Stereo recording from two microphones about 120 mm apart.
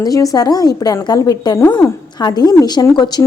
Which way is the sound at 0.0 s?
30° left (ahead or behind).